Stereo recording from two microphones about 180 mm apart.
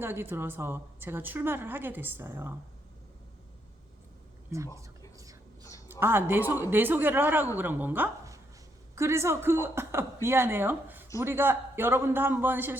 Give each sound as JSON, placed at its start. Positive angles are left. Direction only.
{"t": 0.0, "sound": "a woman's voice", "side_deg": -10}
{"t": 4.4, "sound": "speech", "side_deg": -15}
{"t": 5.1, "sound": "whispering", "side_deg": -20}
{"t": 5.9, "sound": "a woman's voice", "side_deg": -10}